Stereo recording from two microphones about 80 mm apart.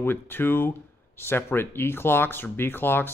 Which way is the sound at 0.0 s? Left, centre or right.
Left.